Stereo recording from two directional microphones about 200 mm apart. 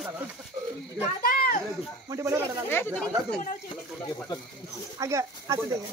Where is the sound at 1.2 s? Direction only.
50° left (ahead or behind).